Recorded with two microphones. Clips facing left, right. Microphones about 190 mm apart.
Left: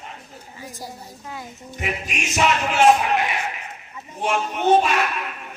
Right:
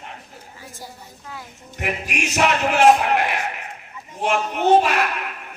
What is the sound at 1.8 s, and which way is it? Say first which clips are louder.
Speech: right 3 dB; 60° right (ahead or behind).